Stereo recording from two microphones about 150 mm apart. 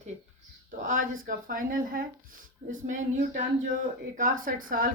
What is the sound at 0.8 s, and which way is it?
Speech, 60° right (ahead or behind).